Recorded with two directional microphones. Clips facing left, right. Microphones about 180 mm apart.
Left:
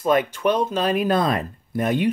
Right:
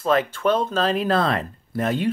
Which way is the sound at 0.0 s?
15° left (ahead or behind).